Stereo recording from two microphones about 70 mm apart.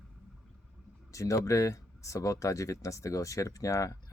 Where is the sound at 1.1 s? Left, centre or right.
Left.